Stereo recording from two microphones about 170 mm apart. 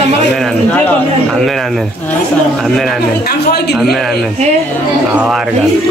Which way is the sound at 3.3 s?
70° left (ahead or behind).